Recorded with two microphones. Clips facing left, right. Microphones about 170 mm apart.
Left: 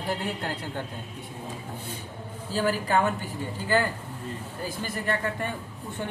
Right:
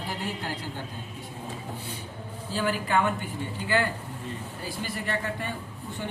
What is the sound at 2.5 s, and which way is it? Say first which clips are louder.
Speech: left 2 dB; 40° left (ahead or behind).